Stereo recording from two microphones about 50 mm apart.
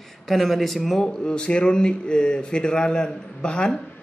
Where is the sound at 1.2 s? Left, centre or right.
Centre.